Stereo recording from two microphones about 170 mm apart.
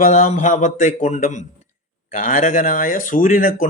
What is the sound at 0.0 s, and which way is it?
Speech, 45° left (ahead or behind).